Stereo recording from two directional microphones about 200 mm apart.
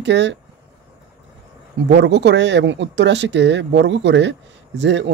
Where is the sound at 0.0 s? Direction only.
60° right (ahead or behind).